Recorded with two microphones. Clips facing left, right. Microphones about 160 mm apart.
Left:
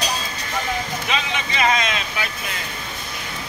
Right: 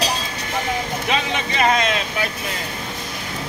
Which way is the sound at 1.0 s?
50° right (ahead or behind).